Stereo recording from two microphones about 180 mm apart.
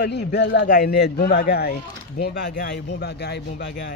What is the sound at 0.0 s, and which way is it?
A man's voice, 70° left (ahead or behind).